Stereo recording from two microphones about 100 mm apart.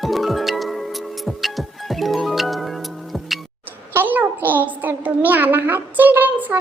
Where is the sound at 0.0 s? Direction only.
Centre (ahead or behind).